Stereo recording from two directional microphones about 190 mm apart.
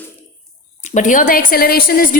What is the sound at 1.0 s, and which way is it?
A woman's voice, 40° left (ahead or behind).